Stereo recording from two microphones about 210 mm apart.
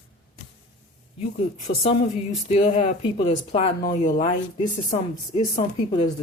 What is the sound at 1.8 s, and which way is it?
Speech, 30° left (ahead or behind).